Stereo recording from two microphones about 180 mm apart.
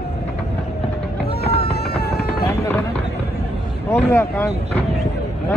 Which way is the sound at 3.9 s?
10° left (ahead or behind).